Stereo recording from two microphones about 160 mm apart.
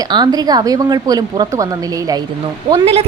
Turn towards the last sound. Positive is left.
turn(degrees=-40)  # may be behind; listen again after turning